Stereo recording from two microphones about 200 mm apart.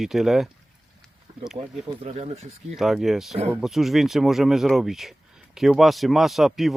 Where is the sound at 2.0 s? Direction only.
30° right (ahead or behind).